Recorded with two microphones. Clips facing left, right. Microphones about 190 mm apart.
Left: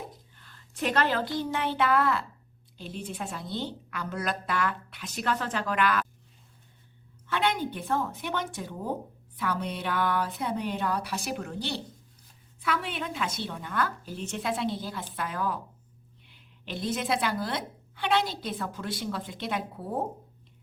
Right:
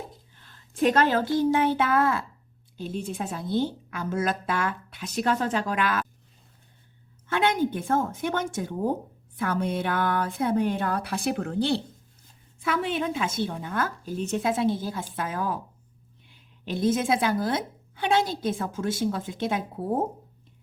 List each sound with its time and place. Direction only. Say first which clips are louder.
0.4 s a woman's voice: right 8 dB; 45° right (ahead or behind)
2.7 s a woman's voice: right 5 dB; 45° right (ahead or behind)
7.3 s a woman's voice: right 4 dB; 45° right (ahead or behind)
12.5 s a woman's voice: right 5 dB; 45° right (ahead or behind)
16.6 s a woman's voice: right 6 dB; 45° right (ahead or behind)